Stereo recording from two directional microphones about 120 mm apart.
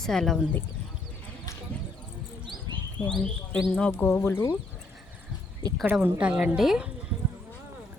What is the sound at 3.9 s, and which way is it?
Speech, 20° left (ahead or behind).